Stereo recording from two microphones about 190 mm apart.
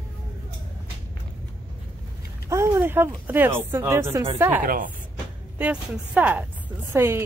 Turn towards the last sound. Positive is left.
turn(degrees=-15)  # may be behind; listen again after turning